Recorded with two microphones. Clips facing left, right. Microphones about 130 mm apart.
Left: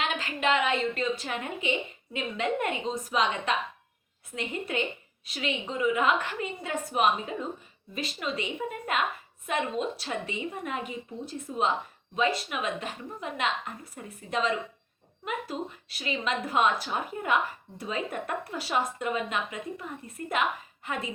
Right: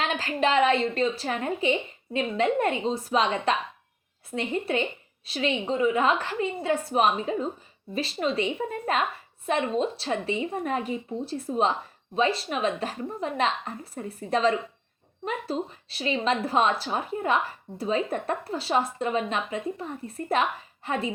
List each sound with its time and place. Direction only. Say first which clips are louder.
0.2 s a woman's voice: right 6 dB; 35° right (ahead or behind)